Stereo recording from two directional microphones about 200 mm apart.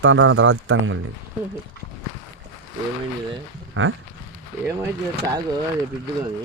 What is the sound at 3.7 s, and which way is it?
Speech, 80° right.